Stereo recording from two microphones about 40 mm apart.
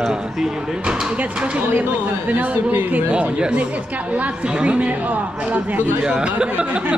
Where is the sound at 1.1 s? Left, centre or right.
Right.